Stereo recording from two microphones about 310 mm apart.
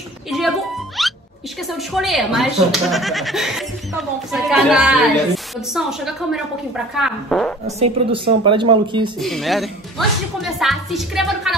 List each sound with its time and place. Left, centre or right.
0.3 s speech: centre
7.6 s speech: centre
9.2 s speech: centre